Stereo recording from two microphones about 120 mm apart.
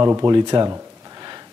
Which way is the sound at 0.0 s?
25° right (ahead or behind).